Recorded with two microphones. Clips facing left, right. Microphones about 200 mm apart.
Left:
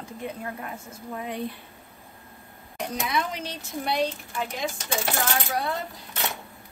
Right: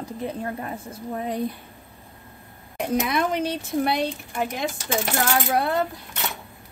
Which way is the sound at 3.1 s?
55° right (ahead or behind).